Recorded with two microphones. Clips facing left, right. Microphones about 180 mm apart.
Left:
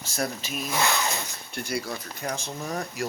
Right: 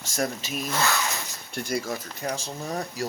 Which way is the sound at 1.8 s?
45° right (ahead or behind).